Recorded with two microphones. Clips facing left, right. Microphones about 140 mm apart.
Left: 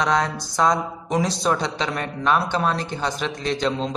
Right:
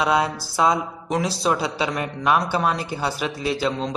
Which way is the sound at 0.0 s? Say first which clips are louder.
Right 1 dB; 10° right (ahead or behind).